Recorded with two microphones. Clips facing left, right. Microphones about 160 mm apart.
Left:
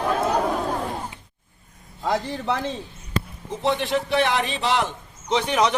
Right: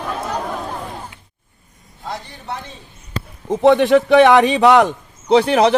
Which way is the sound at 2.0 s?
90° left.